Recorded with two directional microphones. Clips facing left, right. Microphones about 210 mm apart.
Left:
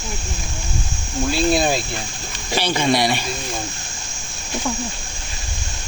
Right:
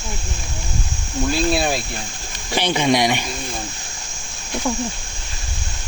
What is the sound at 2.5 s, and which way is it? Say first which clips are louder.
Speech: right 1 dB; 15° right (ahead or behind).